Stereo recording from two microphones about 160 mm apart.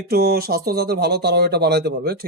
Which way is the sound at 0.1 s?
75° right (ahead or behind).